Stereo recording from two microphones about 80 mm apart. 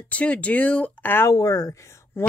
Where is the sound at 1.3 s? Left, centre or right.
Left.